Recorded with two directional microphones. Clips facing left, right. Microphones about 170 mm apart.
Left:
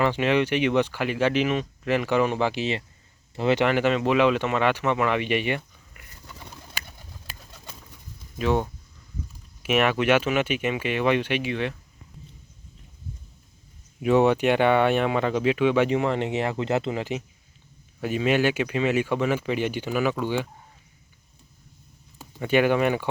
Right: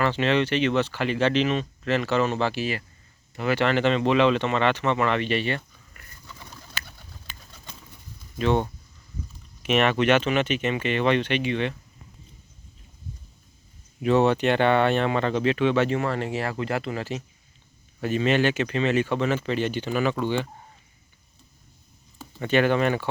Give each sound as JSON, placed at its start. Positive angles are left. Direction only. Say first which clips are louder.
{"t": 0.0, "sound": "speech", "louder": "left 1 dB", "side_deg": 10}
{"t": 3.6, "sound": "speech", "louder": "even", "side_deg": 10}
{"t": 8.4, "sound": "speech", "louder": "right 1 dB", "side_deg": 5}
{"t": 14.0, "sound": "speech", "louder": "left 1 dB", "side_deg": 10}
{"t": 22.2, "sound": "speech", "louder": "left 1 dB", "side_deg": 10}